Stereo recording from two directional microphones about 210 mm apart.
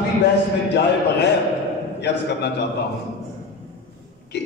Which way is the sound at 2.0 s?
55° left (ahead or behind).